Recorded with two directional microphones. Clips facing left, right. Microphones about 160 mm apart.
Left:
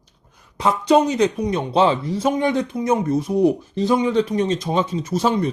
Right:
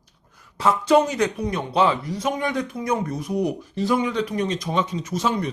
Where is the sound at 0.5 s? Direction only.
20° left (ahead or behind).